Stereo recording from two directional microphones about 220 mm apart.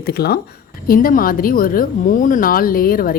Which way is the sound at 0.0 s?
45° left (ahead or behind).